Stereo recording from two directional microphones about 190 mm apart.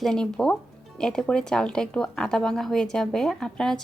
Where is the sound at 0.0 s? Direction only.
5° left (ahead or behind).